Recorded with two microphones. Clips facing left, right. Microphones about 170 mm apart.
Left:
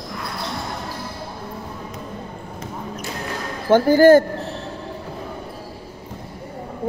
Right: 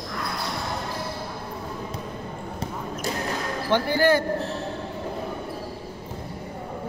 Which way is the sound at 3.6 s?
45° left (ahead or behind).